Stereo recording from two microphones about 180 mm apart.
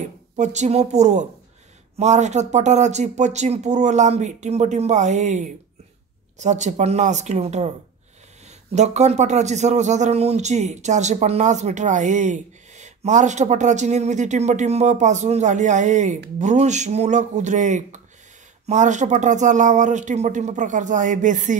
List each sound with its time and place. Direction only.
0.0 s a man's voice: 40° right (ahead or behind)